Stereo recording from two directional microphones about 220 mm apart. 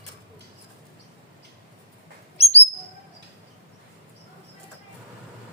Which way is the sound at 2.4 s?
30° left (ahead or behind).